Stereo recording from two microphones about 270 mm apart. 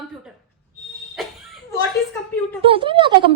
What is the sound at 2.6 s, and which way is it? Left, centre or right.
Speech, centre.